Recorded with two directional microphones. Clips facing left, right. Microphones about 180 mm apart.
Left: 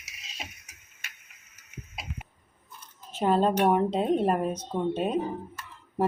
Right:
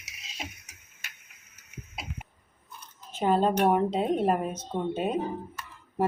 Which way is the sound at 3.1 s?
Centre (ahead or behind).